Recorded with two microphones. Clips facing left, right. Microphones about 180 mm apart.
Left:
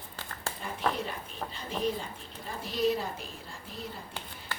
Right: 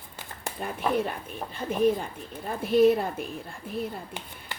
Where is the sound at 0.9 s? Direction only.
55° right (ahead or behind).